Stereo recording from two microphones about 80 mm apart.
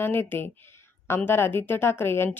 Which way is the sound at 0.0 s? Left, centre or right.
Left.